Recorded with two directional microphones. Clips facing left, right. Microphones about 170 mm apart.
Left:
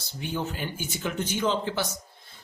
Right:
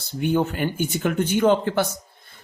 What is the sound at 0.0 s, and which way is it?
Speech, 55° right (ahead or behind).